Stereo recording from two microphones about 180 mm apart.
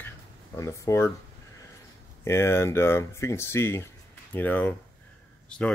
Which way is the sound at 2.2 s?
15° left (ahead or behind).